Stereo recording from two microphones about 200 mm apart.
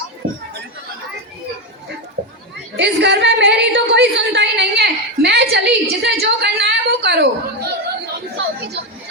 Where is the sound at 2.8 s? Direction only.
60° right (ahead or behind).